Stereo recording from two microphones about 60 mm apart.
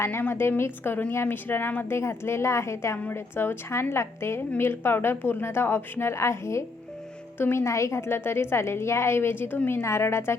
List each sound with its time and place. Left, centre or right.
0.0 s a woman's voice: left
2.0 s a woman's voice: left
7.3 s speech: left
7.6 s a woman's voice: left